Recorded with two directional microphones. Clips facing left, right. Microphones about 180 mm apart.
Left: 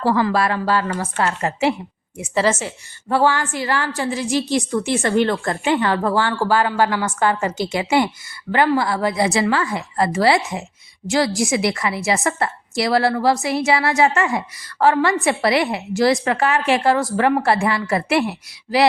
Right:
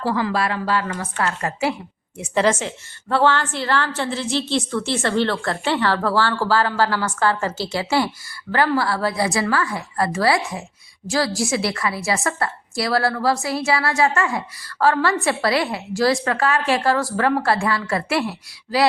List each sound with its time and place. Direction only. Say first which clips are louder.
0.0 s a woman's voice: left 4 dB; 50° left (ahead or behind); by 1.0 s 35° left (ahead or behind)
1.2 s a woman's voice: left 3 dB; 25° left (ahead or behind)
2.1 s a woman's voice: even; 5° left (ahead or behind); by 18.9 s 20° left (ahead or behind)